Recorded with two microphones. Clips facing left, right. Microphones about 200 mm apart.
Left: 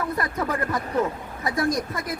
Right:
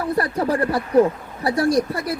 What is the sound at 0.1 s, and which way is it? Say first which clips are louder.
Speech: right 6 dB; 35° right (ahead or behind).